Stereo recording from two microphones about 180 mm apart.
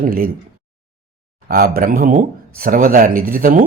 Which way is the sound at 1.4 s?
55° right (ahead or behind).